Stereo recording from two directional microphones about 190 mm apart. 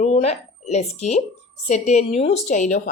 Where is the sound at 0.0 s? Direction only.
35° left (ahead or behind).